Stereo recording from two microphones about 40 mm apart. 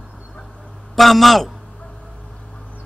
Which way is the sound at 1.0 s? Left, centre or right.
Centre.